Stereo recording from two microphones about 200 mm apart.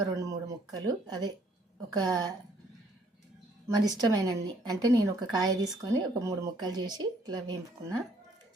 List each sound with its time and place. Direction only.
0.1 s a woman's voice: 15° right (ahead or behind)
3.8 s a woman's voice: 20° right (ahead or behind)